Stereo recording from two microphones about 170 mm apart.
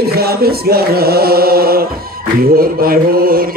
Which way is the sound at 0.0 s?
65° right (ahead or behind).